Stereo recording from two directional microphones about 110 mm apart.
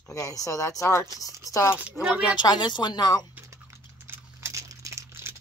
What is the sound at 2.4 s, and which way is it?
Speech, 40° left (ahead or behind).